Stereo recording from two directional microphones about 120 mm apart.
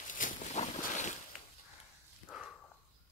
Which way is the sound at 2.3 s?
Centre (ahead or behind).